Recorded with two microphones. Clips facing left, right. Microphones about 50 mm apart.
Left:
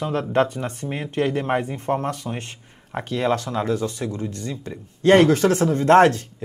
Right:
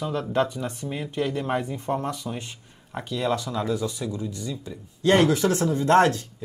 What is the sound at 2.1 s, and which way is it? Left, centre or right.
Speech, left.